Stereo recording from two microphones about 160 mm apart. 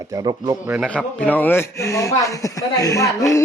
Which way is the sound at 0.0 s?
20° right (ahead or behind).